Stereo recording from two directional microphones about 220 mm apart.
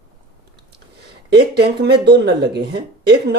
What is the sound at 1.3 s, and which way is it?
Speech, 50° right (ahead or behind).